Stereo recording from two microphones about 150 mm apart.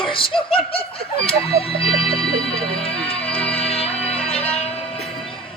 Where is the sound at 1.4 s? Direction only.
40° left (ahead or behind).